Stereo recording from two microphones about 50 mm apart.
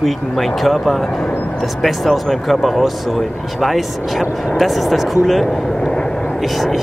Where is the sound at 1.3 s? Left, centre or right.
Left.